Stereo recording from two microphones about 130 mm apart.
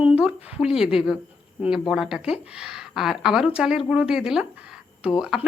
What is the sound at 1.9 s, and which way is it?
A woman's voice, 5° right (ahead or behind).